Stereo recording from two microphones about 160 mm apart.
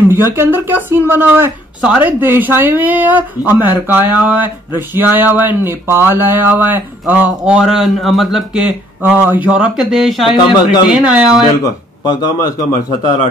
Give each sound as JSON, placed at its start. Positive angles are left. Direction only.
{"t": 0.1, "sound": "speech", "side_deg": -15}
{"t": 11.6, "sound": "a man's voice", "side_deg": 25}